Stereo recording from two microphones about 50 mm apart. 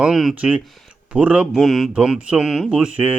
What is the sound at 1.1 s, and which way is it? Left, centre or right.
Mantra, right.